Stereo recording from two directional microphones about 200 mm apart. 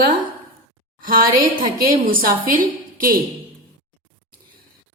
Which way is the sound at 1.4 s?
45° right (ahead or behind).